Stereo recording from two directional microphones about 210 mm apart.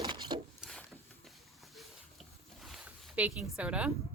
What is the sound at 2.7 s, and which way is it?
Speech, 5° right (ahead or behind).